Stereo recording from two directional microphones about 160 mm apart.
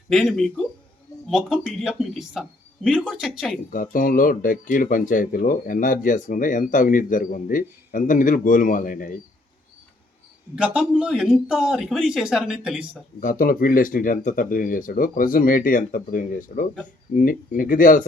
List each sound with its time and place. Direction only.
0.1 s a man's voice: centre (ahead or behind)
3.7 s speech: 55° left (ahead or behind)
10.5 s a man's voice: 5° right (ahead or behind)
13.1 s speech: 60° left (ahead or behind)